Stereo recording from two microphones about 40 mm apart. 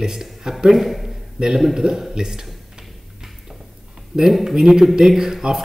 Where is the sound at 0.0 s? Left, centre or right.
Centre.